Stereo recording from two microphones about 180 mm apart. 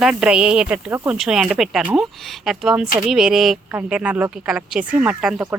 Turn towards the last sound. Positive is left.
turn(degrees=-10)  # may be behind; listen again after turning